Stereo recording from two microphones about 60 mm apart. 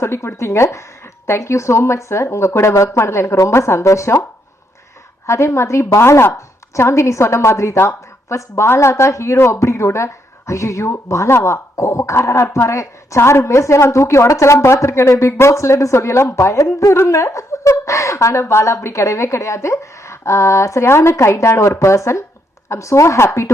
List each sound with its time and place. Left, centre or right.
0.0 s a woman's voice: left
6.0 s speech: left
13.1 s a woman's voice: left